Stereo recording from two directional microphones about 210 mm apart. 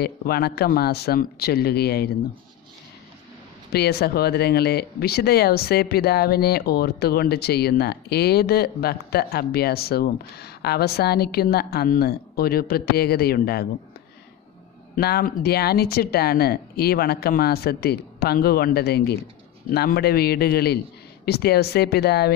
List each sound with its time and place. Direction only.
0.0 s speech: 50° left (ahead or behind)
3.7 s speech: 50° left (ahead or behind)
15.0 s speech: 50° left (ahead or behind)